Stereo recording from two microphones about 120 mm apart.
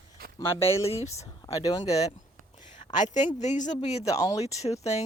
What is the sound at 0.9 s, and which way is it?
Speech, 60° left (ahead or behind).